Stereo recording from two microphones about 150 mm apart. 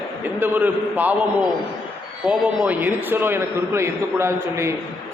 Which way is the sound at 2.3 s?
5° right (ahead or behind).